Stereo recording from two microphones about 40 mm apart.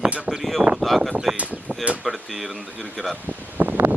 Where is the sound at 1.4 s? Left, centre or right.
Right.